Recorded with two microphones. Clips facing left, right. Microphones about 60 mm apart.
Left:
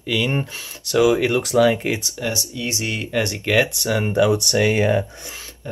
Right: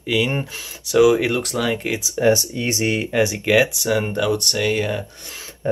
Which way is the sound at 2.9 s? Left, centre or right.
Centre.